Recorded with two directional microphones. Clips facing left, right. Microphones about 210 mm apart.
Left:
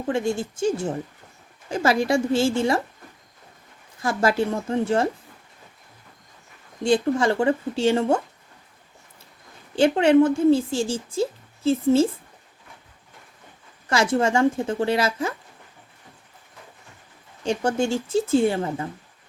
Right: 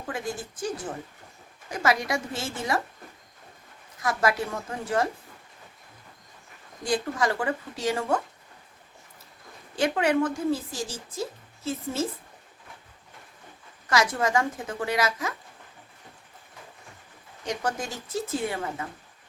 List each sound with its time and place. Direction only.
0.1 s speech: 25° left (ahead or behind)
4.0 s speech: 30° left (ahead or behind)
6.8 s speech: 25° left (ahead or behind)
9.7 s speech: 30° left (ahead or behind)
13.9 s speech: 30° left (ahead or behind)
17.4 s speech: 30° left (ahead or behind)